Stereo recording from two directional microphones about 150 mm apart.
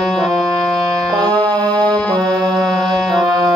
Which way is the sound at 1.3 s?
5° left (ahead or behind).